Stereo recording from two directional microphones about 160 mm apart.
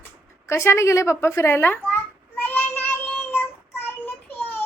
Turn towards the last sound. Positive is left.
turn(degrees=10)  # may be behind; listen again after turning